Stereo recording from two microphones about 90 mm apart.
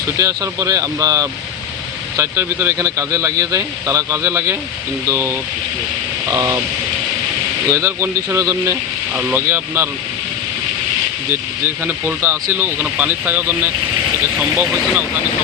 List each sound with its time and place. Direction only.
0.2 s speech: 40° right (ahead or behind)
2.1 s speech: 25° right (ahead or behind)
7.7 s speech: 30° right (ahead or behind)
9.1 s speech: 25° right (ahead or behind)
11.3 s speech: 25° right (ahead or behind)